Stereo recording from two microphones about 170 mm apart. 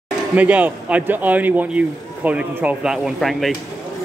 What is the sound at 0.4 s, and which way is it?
Speech, 10° right (ahead or behind).